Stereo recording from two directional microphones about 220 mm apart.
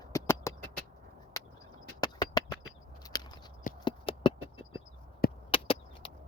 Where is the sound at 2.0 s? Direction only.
20° left (ahead or behind).